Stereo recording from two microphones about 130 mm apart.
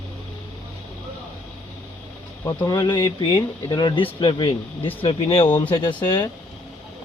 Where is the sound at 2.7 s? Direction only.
35° left (ahead or behind).